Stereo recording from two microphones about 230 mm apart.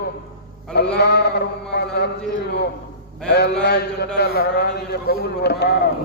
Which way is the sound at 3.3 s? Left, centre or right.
Left.